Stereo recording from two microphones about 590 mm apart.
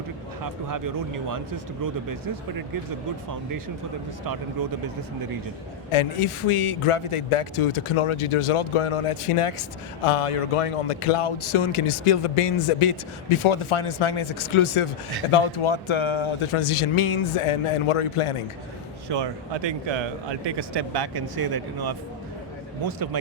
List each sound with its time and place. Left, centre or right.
0.4 s speech: right
5.9 s a man's voice: left
19.0 s speech: right